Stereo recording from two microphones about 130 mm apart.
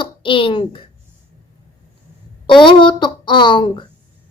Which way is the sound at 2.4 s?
40° left (ahead or behind).